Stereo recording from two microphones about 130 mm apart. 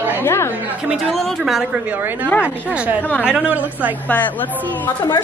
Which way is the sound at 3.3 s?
10° right (ahead or behind).